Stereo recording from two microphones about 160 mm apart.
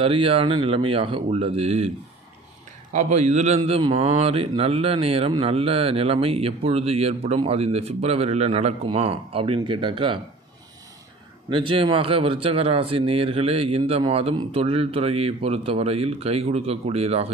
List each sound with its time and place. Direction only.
0.0 s a man's voice: 35° right (ahead or behind)
2.9 s a man's voice: 45° right (ahead or behind)
11.5 s a man's voice: 30° right (ahead or behind)